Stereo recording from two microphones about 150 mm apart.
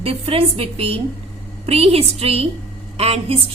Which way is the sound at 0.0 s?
40° right (ahead or behind).